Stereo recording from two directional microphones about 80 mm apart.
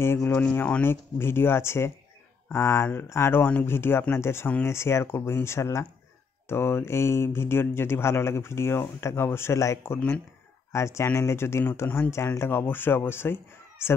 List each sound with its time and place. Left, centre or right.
0.0 s speech: left